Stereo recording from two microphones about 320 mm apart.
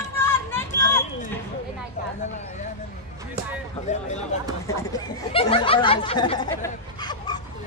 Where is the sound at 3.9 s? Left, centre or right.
Left.